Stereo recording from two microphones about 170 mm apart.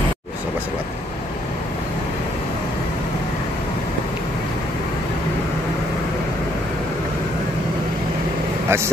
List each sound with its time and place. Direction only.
8.6 s speech: 15° right (ahead or behind)